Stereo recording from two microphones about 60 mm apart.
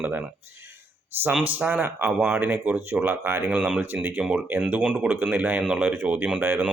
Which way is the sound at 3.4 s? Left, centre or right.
Right.